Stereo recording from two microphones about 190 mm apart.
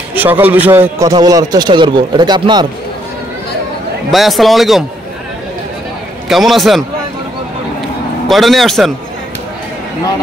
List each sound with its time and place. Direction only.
0.1 s a man's voice: 10° right (ahead or behind)
4.1 s a man's voice: centre (ahead or behind)
6.2 s a man's voice: centre (ahead or behind)
8.3 s a man's voice: centre (ahead or behind)